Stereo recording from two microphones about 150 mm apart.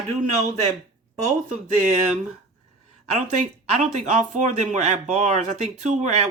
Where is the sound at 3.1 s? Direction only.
55° right (ahead or behind).